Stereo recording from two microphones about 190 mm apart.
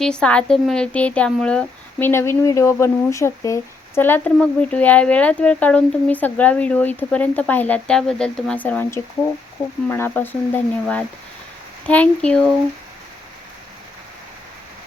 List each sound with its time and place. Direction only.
0.0 s speech: 5° left (ahead or behind)